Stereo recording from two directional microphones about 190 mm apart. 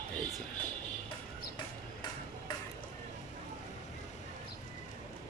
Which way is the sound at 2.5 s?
20° left (ahead or behind).